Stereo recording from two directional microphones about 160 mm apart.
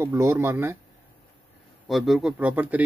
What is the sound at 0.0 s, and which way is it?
Speech, 15° right (ahead or behind).